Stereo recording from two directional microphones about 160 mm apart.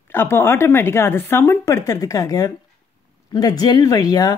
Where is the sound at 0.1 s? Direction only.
15° left (ahead or behind).